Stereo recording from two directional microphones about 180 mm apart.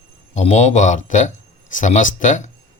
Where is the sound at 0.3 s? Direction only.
40° left (ahead or behind).